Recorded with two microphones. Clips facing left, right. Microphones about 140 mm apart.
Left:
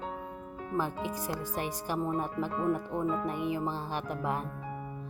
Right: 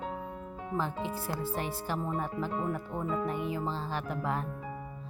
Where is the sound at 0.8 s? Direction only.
15° left (ahead or behind).